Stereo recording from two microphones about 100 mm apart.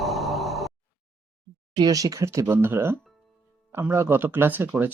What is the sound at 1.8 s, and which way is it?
Speech, 35° right (ahead or behind).